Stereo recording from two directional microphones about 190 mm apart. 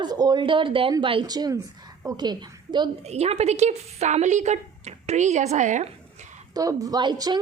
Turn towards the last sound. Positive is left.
turn(degrees=-20)  # may be behind; listen again after turning